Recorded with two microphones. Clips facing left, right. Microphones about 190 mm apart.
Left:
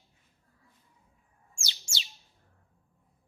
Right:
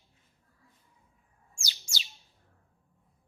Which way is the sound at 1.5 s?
25° left (ahead or behind).